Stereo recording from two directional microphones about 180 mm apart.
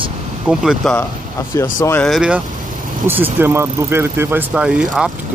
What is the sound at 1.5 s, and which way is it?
Speech, 15° left (ahead or behind).